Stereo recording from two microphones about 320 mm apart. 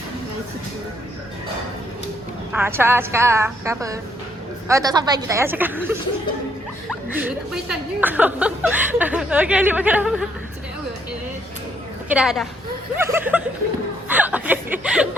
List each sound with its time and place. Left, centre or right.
2.5 s a woman's voice: centre
7.1 s a woman's voice: centre
12.0 s a woman's voice: centre
14.1 s chuckle: centre